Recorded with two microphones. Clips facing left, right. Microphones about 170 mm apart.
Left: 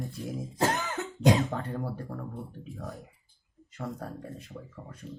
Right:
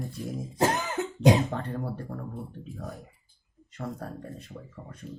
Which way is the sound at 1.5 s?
Centre (ahead or behind).